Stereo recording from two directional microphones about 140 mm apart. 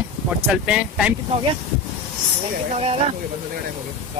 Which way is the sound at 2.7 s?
45° right (ahead or behind).